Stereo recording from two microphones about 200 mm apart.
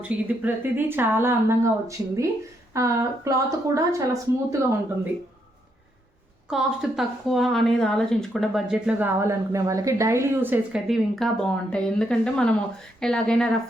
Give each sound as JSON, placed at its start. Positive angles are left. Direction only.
{"t": 0.0, "sound": "speech", "side_deg": -10}
{"t": 6.5, "sound": "a woman's voice", "side_deg": 0}